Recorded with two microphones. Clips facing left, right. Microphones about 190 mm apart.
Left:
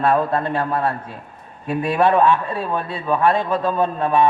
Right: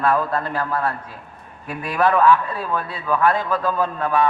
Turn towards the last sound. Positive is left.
turn(degrees=25)  # may be behind; listen again after turning